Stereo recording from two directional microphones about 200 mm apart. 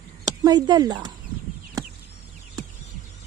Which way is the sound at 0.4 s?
20° right (ahead or behind).